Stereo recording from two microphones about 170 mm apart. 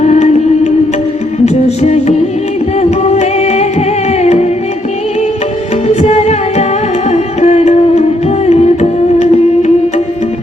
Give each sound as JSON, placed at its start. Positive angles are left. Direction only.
{"t": 0.0, "sound": "music", "side_deg": 40}
{"t": 5.9, "sound": "music", "side_deg": 40}